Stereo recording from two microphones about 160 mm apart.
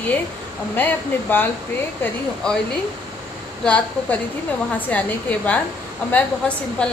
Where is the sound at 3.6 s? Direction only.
10° left (ahead or behind).